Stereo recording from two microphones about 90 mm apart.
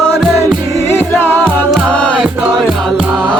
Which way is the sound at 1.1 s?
15° left (ahead or behind).